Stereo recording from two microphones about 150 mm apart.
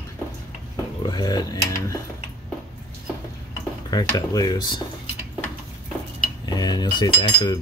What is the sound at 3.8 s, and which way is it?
Speech, 25° left (ahead or behind).